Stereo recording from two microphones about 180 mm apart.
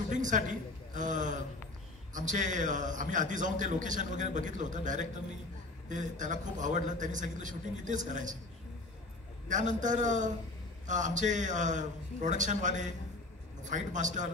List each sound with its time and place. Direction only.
0.1 s a man's voice: 45° right (ahead or behind)
9.5 s a man's voice: 45° right (ahead or behind)